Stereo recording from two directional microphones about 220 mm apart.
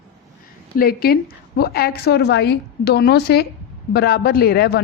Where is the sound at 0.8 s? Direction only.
45° left (ahead or behind).